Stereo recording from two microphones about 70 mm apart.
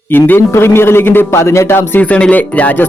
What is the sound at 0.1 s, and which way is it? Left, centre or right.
A man's voice, left.